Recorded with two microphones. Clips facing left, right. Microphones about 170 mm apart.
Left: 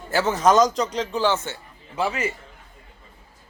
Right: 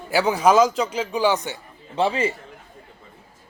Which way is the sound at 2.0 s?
30° right (ahead or behind).